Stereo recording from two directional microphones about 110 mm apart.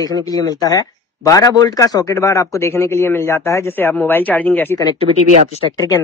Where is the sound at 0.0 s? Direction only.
35° left (ahead or behind); by 4.7 s 15° left (ahead or behind).